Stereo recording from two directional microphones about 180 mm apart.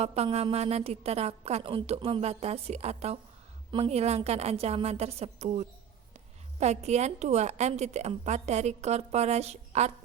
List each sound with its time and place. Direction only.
0.0 s a woman's voice: 35° right (ahead or behind)